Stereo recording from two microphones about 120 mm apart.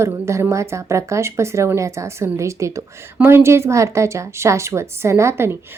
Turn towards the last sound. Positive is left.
turn(degrees=-25)  # may be behind; listen again after turning